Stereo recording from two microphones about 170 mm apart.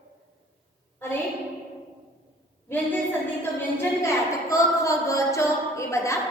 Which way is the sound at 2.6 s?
10° left (ahead or behind).